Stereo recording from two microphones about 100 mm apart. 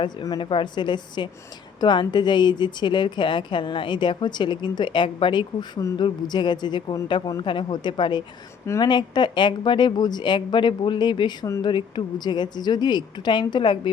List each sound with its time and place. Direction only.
0.0 s a woman's voice: 50° left (ahead or behind)